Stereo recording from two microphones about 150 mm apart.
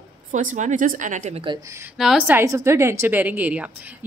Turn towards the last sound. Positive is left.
turn(degrees=-10)  # may be behind; listen again after turning